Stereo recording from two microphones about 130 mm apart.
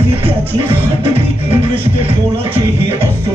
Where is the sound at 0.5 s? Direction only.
45° right (ahead or behind).